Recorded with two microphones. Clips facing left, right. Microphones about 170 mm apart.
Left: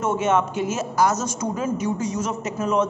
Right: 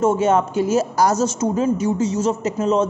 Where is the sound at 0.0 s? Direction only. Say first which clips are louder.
Right 4 dB; 30° right (ahead or behind).